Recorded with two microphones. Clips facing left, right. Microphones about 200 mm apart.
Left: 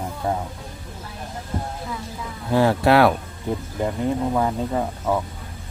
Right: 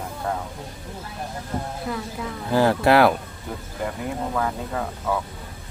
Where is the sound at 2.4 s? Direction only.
Centre (ahead or behind).